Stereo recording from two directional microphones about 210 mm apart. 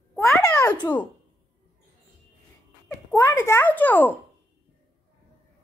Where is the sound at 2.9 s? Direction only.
15° left (ahead or behind).